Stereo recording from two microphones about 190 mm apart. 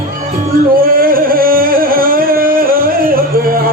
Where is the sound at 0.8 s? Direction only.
50° right (ahead or behind).